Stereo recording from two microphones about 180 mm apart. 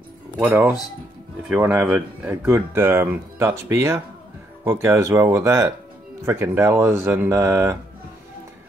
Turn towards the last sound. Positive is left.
turn(degrees=-15)  # may be behind; listen again after turning